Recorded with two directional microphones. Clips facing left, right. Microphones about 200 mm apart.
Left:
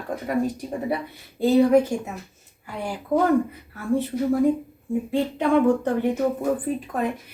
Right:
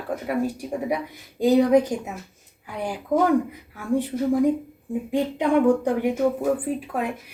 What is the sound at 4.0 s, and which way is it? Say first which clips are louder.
A woman's voice: right 1 dB; 15° right (ahead or behind).